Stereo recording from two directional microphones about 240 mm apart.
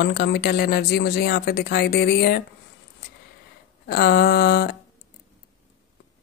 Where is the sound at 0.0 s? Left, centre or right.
Left.